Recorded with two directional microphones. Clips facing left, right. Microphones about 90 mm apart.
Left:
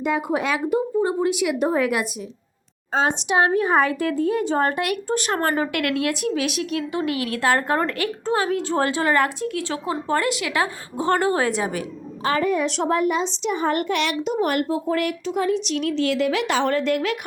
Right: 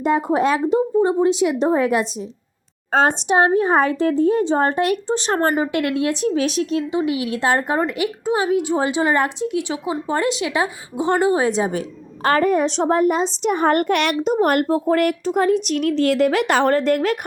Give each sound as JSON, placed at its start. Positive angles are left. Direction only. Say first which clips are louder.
{"t": 0.0, "sound": "a woman's voice", "louder": "right 5 dB", "side_deg": -35}
{"t": 2.9, "sound": "a woman's voice", "louder": "right 4 dB", "side_deg": -50}
{"t": 3.2, "sound": "a woman's voice", "louder": "right 3 dB", "side_deg": -30}
{"t": 10.2, "sound": "a woman's voice", "louder": "right 4 dB", "side_deg": -25}
{"t": 12.2, "sound": "a woman's voice", "louder": "right 4 dB", "side_deg": -50}
{"t": 12.6, "sound": "a woman's voice", "louder": "right 4 dB", "side_deg": -30}